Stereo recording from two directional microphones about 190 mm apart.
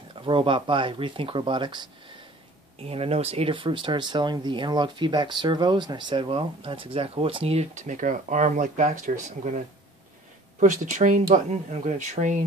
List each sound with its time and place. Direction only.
0.2 s speech: 25° right (ahead or behind)
2.9 s speech: 30° right (ahead or behind)
10.6 s speech: 40° right (ahead or behind)